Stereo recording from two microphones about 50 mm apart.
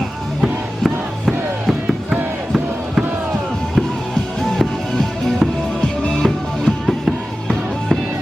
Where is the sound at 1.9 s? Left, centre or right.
Centre.